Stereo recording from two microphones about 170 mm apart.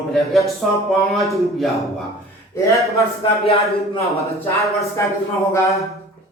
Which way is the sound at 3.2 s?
30° left (ahead or behind).